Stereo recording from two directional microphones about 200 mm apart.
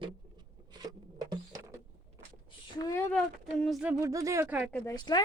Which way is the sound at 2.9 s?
15° left (ahead or behind).